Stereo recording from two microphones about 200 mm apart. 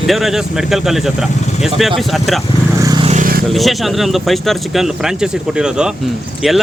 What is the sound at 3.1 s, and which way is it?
Vehicle, 40° right (ahead or behind).